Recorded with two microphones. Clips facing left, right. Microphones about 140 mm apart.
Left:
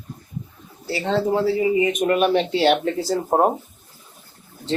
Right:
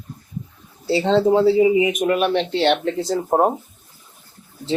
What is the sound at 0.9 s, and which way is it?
Speech, 25° right (ahead or behind).